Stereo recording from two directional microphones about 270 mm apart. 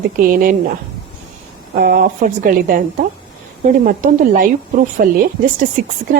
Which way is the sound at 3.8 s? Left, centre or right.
Right.